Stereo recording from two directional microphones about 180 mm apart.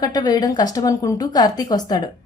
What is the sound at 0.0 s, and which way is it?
A woman's voice, 20° left (ahead or behind).